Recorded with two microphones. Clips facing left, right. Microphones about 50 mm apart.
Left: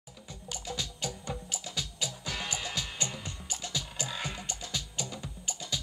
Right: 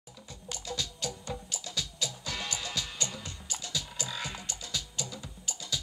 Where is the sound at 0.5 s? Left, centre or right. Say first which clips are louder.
Right 1 dB; left.